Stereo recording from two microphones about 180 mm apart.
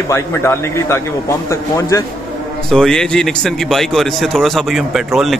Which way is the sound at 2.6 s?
5° left (ahead or behind).